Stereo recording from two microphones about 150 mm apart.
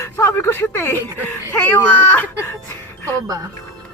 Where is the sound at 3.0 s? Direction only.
25° right (ahead or behind).